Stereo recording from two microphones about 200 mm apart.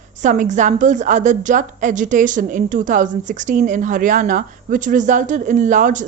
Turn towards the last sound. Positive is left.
turn(degrees=-40)  # may be behind; listen again after turning